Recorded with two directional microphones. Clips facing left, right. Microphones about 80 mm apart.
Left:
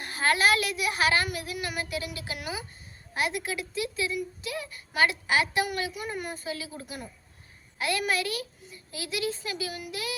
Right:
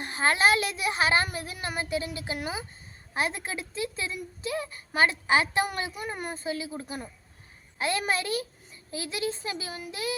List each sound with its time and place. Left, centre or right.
0.0 s a woman's voice: right